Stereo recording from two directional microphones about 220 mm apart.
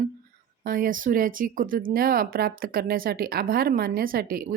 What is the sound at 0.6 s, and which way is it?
Speech, 40° right (ahead or behind).